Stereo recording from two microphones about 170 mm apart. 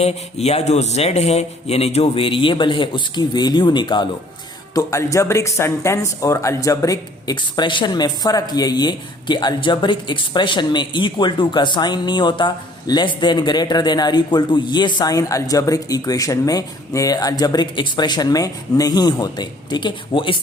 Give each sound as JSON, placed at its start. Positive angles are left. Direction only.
{"t": 0.0, "sound": "a man's voice", "side_deg": 35}